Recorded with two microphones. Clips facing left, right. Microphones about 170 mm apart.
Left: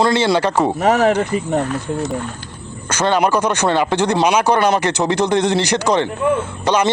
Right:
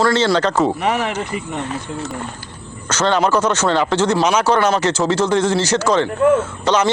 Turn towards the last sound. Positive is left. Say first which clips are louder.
# even
turn(degrees=10)  # may be behind; listen again after turning